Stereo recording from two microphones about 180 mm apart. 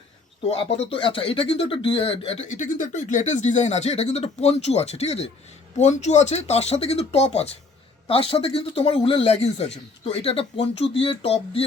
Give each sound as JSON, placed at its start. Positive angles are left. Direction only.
{"t": 0.5, "sound": "speech", "side_deg": 30}